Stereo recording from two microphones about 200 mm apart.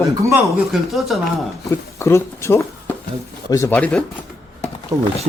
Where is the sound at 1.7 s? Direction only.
15° left (ahead or behind).